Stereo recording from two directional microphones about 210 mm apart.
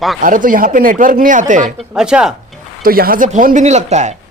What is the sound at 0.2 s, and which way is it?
Speech, 40° right (ahead or behind).